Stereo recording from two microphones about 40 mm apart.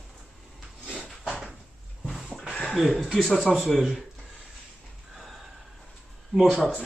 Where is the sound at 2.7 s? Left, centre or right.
Centre.